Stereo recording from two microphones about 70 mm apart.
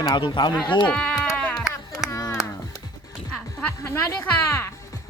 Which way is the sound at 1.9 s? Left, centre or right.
Left.